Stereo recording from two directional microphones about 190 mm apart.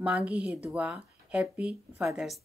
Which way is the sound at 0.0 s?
5° right (ahead or behind).